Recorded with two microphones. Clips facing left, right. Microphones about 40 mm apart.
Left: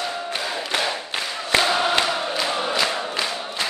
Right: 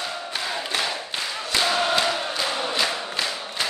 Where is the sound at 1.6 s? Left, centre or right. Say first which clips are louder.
Left 2 dB; centre.